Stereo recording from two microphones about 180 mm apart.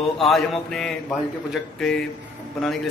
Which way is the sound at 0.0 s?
Centre (ahead or behind).